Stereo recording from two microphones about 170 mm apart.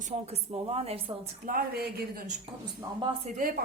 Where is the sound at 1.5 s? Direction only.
65° right (ahead or behind).